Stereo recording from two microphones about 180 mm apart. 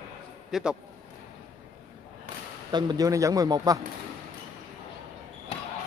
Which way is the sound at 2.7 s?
20° right (ahead or behind).